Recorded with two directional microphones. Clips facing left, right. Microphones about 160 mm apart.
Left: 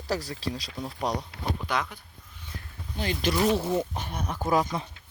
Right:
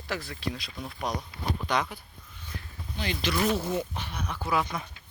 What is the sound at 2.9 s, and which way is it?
Speech, 45° left (ahead or behind).